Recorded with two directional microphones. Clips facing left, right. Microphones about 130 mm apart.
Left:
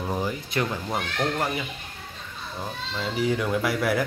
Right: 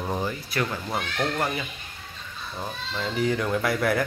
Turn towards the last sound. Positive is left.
turn(degrees=10)  # may be behind; listen again after turning